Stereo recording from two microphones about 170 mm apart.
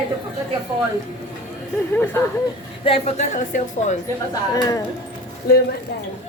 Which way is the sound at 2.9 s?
35° left (ahead or behind).